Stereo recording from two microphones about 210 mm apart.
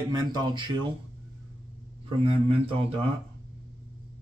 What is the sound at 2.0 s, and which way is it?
Speech, 25° right (ahead or behind).